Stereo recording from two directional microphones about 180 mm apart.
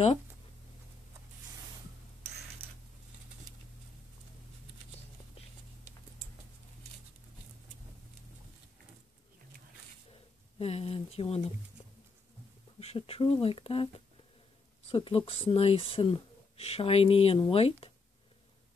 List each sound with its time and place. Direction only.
10.6 s speech: 35° left (ahead or behind)
12.7 s speech: 30° left (ahead or behind)
14.9 s speech: 30° left (ahead or behind)